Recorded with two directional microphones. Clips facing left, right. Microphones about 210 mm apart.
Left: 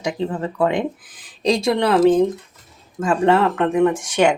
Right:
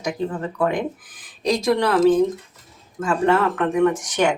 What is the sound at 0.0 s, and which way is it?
Speech, 25° left (ahead or behind).